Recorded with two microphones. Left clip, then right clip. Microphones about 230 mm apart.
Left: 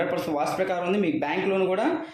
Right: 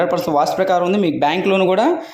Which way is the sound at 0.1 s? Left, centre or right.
Right.